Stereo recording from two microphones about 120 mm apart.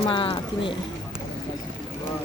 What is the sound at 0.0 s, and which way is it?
Speech, 45° left (ahead or behind).